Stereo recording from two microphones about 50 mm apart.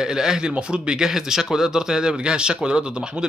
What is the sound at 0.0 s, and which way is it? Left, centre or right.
A man's voice, centre.